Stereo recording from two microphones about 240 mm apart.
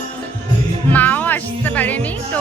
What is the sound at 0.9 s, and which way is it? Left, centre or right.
Music, centre.